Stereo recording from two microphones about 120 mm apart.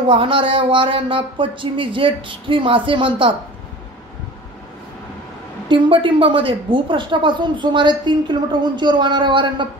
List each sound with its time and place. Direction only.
0.1 s speech: 45° right (ahead or behind)
5.7 s a woman's voice: 45° right (ahead or behind)